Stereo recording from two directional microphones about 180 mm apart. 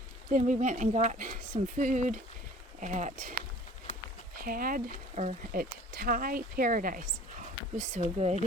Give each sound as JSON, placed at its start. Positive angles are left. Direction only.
{"t": 0.3, "sound": "speech", "side_deg": -45}